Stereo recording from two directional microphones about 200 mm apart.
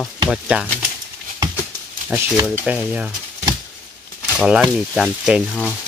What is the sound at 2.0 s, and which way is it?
Speech, 10° right (ahead or behind).